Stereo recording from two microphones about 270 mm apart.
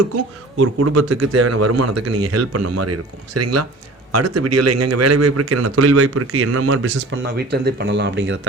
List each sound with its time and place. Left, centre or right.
0.5 s speech: right
7.3 s speech: right